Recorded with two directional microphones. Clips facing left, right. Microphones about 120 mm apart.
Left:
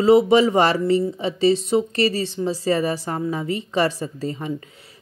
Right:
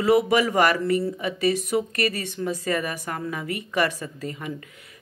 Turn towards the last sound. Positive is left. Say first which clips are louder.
# left 5 dB
turn(degrees=30)  # may be behind; listen again after turning